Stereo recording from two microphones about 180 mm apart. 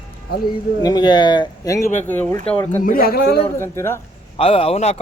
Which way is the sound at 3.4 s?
15° left (ahead or behind).